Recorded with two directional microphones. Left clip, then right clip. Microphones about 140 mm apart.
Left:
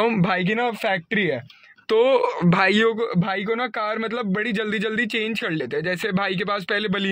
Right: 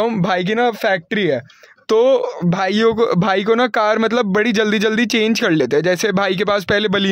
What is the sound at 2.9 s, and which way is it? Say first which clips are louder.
Speech: right 9 dB; 85° right.